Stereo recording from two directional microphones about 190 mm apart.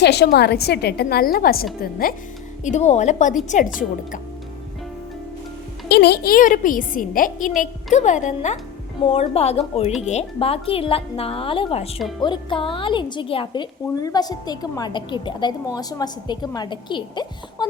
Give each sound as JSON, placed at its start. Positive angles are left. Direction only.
{"t": 0.0, "sound": "a woman's voice", "side_deg": 60}
{"t": 2.6, "sound": "a woman's voice", "side_deg": 35}
{"t": 5.9, "sound": "a woman's voice", "side_deg": 60}